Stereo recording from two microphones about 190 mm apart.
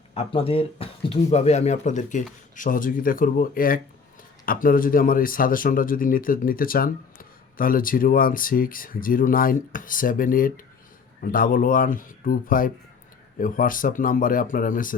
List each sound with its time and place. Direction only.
0.1 s speech: 30° left (ahead or behind); by 14.9 s 45° left (ahead or behind)